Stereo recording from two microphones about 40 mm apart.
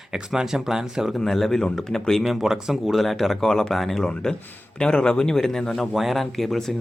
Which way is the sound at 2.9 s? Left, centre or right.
Centre.